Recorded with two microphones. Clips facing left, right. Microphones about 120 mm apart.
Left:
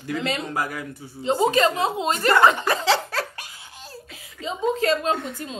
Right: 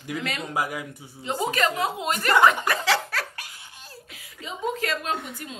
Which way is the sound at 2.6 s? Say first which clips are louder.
Left 3 dB; 25° left (ahead or behind).